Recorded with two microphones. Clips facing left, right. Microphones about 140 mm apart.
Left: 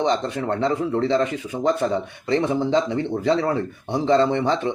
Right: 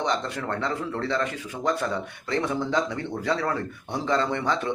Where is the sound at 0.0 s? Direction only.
25° left (ahead or behind).